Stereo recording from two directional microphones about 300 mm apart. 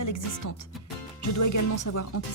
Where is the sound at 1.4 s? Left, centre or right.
Left.